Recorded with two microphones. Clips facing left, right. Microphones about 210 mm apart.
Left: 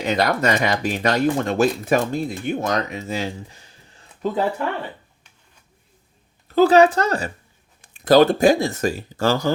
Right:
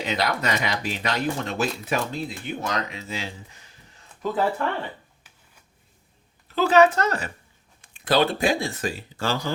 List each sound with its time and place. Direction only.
0.0 s speech: 45° left (ahead or behind)
4.2 s speech: 20° left (ahead or behind)
6.6 s a woman's voice: 35° left (ahead or behind)